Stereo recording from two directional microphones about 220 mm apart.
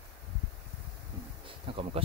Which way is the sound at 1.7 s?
25° right (ahead or behind).